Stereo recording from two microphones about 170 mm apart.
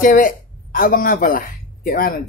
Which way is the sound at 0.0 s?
50° left (ahead or behind).